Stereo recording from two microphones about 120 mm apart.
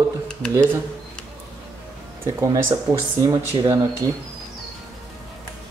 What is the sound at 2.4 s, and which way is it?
Speech, 30° right (ahead or behind).